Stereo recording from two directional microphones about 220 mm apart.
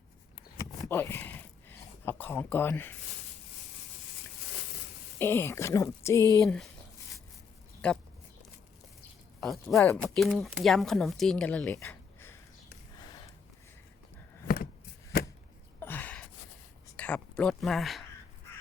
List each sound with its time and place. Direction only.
0.8 s a sound: 10° left (ahead or behind)
5.2 s speech: 10° left (ahead or behind)
6.4 s speech: centre (ahead or behind)
7.8 s speech: 5° left (ahead or behind)
9.4 s speech: centre (ahead or behind)
14.4 s a sound: 45° left (ahead or behind)
15.1 s chop: 45° left (ahead or behind)
15.8 s gasp: 10° left (ahead or behind)
17.0 s speech: 5° left (ahead or behind)